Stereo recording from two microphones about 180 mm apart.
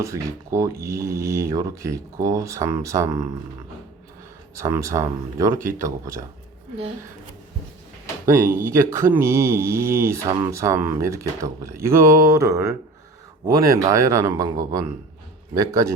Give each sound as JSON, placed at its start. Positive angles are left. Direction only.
{"t": 0.0, "sound": "speech", "side_deg": -15}
{"t": 4.5, "sound": "speech", "side_deg": -15}
{"t": 8.3, "sound": "speech", "side_deg": -15}
{"t": 13.7, "sound": "speech", "side_deg": -15}